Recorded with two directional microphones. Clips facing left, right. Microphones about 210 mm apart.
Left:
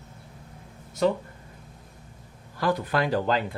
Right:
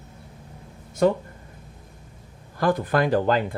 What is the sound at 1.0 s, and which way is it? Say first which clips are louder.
Speech: right 4 dB; 50° right (ahead or behind).